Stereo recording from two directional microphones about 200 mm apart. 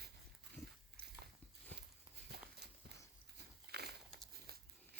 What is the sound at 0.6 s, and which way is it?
Dog, 15° left (ahead or behind).